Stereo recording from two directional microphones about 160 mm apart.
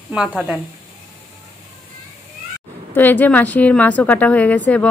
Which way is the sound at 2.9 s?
10° left (ahead or behind).